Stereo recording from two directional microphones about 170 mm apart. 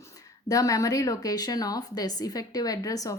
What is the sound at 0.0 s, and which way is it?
Speech, 20° left (ahead or behind).